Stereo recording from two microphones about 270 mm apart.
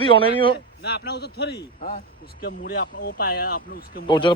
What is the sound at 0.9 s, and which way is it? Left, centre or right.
Speech, left.